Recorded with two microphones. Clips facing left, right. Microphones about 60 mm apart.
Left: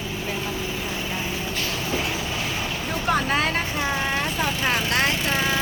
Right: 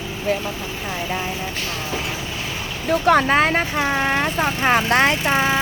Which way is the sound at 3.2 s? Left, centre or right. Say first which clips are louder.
Right 6 dB; right.